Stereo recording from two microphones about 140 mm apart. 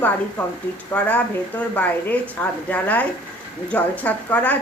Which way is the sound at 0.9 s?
10° left (ahead or behind).